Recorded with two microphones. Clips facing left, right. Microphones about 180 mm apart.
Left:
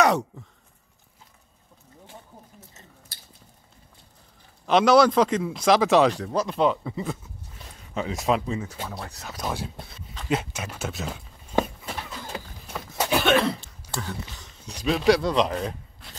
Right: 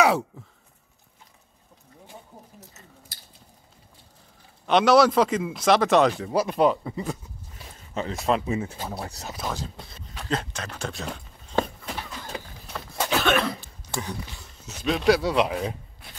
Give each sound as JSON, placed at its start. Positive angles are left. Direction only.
{"t": 0.0, "sound": "sigh", "side_deg": -5}
{"t": 4.6, "sound": "speech", "side_deg": 0}
{"t": 8.8, "sound": "speech", "side_deg": -30}
{"t": 10.2, "sound": "speech", "side_deg": 10}
{"t": 12.6, "sound": "a sound", "side_deg": 5}
{"t": 13.1, "sound": "a sound", "side_deg": 20}
{"t": 14.3, "sound": "speech", "side_deg": -10}